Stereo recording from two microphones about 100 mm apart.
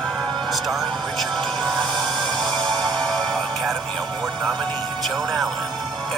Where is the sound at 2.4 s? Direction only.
50° right (ahead or behind).